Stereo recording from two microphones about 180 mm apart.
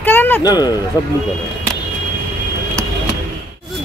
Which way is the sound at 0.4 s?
20° left (ahead or behind).